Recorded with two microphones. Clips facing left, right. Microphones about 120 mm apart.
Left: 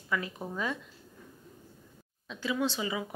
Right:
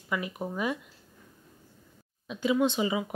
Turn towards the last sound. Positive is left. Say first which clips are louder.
# right 5 dB
turn(degrees=-20)  # may be behind; listen again after turning